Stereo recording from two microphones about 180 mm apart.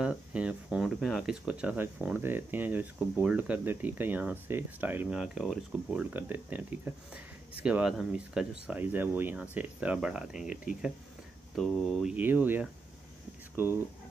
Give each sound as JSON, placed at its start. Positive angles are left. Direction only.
{"t": 0.0, "sound": "speech", "side_deg": -5}
{"t": 10.5, "sound": "speech", "side_deg": 45}
{"t": 11.5, "sound": "speech", "side_deg": 0}